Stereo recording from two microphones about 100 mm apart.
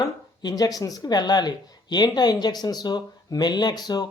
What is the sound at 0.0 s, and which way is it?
Speech, 40° left (ahead or behind).